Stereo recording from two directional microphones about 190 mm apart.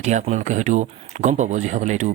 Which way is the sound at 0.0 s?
35° right (ahead or behind).